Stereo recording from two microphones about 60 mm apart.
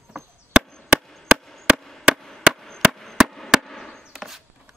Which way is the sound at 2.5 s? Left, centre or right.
Centre.